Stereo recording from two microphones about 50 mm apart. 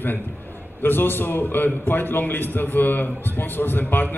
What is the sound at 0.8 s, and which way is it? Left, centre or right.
A man's voice, left.